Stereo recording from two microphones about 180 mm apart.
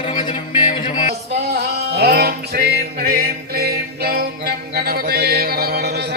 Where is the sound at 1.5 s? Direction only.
65° right (ahead or behind).